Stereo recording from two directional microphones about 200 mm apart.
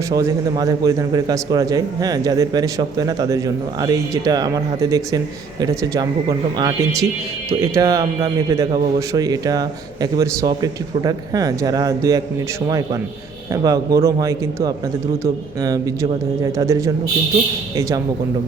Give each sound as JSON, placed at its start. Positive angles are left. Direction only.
{"t": 0.1, "sound": "a man's voice", "side_deg": -15}
{"t": 13.5, "sound": "speech", "side_deg": -15}